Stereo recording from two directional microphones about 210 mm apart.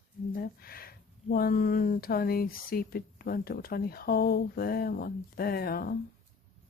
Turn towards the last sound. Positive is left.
turn(degrees=45)  # may be behind; listen again after turning